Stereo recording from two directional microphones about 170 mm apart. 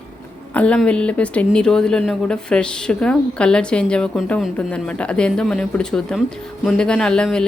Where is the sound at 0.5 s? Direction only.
5° left (ahead or behind).